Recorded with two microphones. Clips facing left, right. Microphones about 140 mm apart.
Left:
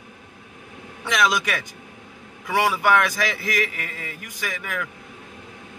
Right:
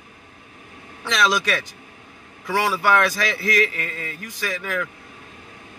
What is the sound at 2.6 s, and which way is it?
A man's voice, 10° left (ahead or behind).